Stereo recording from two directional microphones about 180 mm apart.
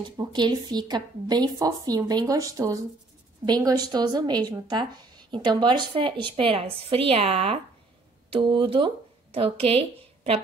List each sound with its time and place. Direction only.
0.0 s speech: 25° right (ahead or behind)